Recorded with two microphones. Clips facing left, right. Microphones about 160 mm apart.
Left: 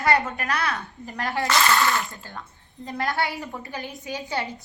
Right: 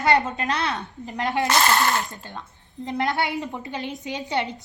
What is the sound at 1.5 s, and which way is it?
Speech, 45° right (ahead or behind).